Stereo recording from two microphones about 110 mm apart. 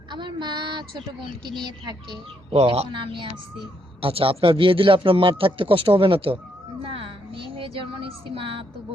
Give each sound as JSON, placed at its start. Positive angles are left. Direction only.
{"t": 0.1, "sound": "child singing", "side_deg": -45}
{"t": 1.6, "sound": "speech", "side_deg": -45}
{"t": 2.5, "sound": "a man's voice", "side_deg": -65}
{"t": 6.8, "sound": "a sound", "side_deg": -55}
{"t": 8.4, "sound": "a man's voice", "side_deg": -55}